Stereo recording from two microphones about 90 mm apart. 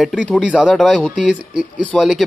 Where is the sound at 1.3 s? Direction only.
10° right (ahead or behind).